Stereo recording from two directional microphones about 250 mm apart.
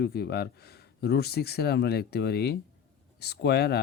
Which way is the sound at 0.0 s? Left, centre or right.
Left.